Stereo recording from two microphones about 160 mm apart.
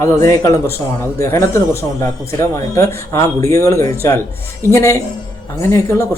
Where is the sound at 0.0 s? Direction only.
20° left (ahead or behind).